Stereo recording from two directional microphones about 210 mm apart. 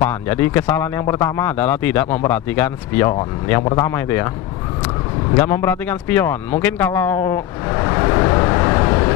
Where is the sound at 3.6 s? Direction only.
25° left (ahead or behind).